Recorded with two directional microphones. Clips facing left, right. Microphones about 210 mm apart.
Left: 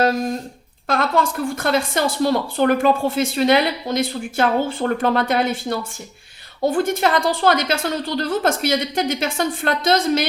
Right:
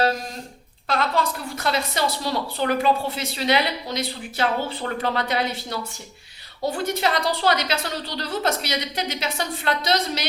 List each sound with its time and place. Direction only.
0.9 s speech: 50° left (ahead or behind)